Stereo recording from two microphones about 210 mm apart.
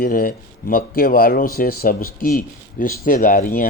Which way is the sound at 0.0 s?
45° left (ahead or behind).